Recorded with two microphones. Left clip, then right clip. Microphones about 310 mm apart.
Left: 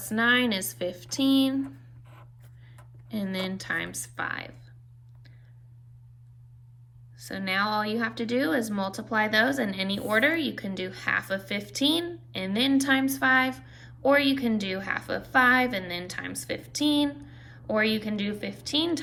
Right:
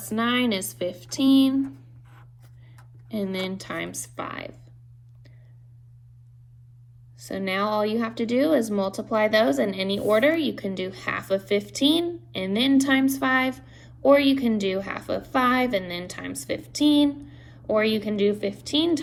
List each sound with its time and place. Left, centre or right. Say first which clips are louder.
0.0 s speech: left 1 dB; centre
3.1 s speech: right 3 dB; centre
7.2 s speech: right 1 dB; centre